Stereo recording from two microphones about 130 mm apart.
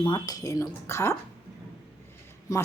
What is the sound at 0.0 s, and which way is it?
A woman's voice, 35° left (ahead or behind).